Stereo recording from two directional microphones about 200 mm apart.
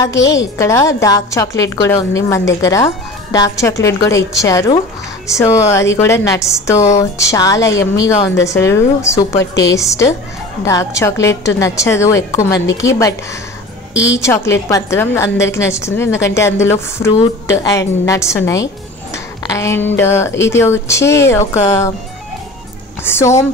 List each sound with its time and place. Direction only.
0.2 s a woman's voice: 65° left (ahead or behind)
0.6 s a woman's voice: 15° left (ahead or behind)
13.9 s a woman's voice: 65° left (ahead or behind)
14.2 s a woman's voice: 15° left (ahead or behind)
23.0 s a woman's voice: 10° left (ahead or behind)